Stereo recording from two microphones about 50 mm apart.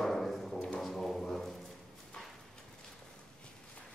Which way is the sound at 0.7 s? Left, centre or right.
Centre.